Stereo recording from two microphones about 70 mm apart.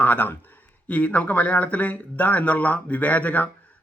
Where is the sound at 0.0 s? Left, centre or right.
Left.